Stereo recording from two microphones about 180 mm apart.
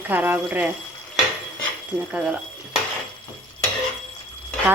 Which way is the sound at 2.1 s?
5° right (ahead or behind).